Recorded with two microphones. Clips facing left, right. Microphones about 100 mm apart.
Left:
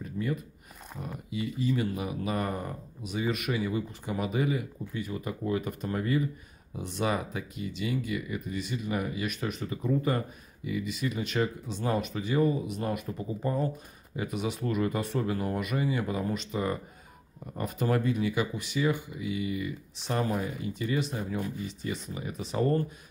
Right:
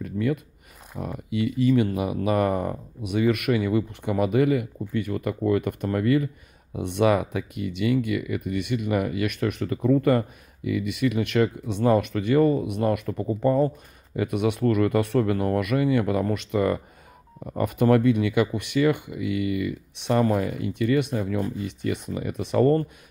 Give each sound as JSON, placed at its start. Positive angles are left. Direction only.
{"t": 0.0, "sound": "a sound", "side_deg": -80}
{"t": 0.9, "sound": "speech", "side_deg": -75}
{"t": 20.3, "sound": "speech", "side_deg": -80}